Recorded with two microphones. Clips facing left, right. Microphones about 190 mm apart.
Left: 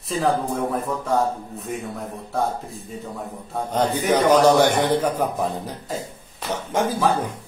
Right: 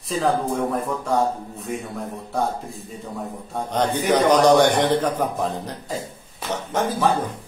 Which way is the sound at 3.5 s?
5° left (ahead or behind).